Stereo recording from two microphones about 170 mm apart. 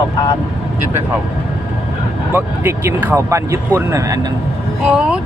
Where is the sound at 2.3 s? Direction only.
15° right (ahead or behind).